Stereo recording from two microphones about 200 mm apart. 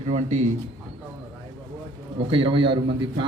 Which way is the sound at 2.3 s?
25° right (ahead or behind).